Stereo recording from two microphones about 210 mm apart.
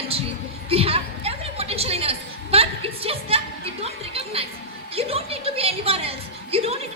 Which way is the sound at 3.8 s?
30° right (ahead or behind).